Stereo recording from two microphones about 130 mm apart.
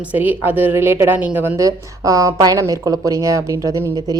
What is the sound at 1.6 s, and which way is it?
A woman's voice, 25° right (ahead or behind).